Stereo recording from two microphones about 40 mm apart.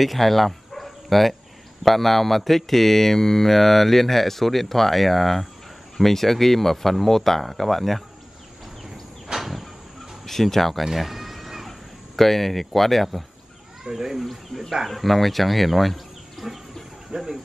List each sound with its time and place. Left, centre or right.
0.0 s speech: centre
9.3 s a sound: centre
10.2 s speech: centre
10.9 s cat: centre
12.2 s speech: centre
13.8 s speech: centre
14.1 s speech: centre
17.1 s speech: right